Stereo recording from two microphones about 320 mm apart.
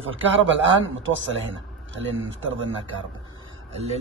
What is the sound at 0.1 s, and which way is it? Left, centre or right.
Speech, right.